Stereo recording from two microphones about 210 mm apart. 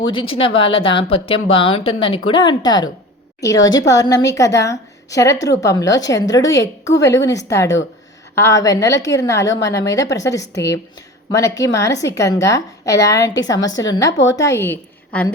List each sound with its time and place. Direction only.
0.1 s a woman's voice: 25° left (ahead or behind)
10.4 s speech: 55° left (ahead or behind)
11.3 s a woman's voice: 15° left (ahead or behind)
13.7 s speech: 65° left (ahead or behind)
14.3 s a woman's voice: 15° left (ahead or behind)